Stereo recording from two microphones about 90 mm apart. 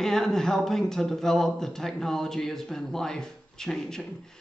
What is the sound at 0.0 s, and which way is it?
Speech, 5° left (ahead or behind).